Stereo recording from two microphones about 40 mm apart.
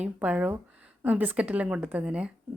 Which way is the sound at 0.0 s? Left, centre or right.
Right.